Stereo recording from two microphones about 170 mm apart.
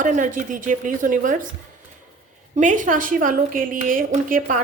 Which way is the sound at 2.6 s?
50° right (ahead or behind).